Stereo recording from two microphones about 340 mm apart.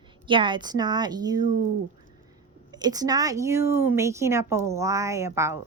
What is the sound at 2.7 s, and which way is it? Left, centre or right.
Speech, centre.